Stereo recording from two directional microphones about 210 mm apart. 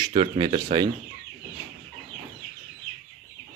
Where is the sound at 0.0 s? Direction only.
25° right (ahead or behind).